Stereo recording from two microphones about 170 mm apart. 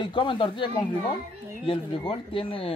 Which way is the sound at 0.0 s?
30° left (ahead or behind).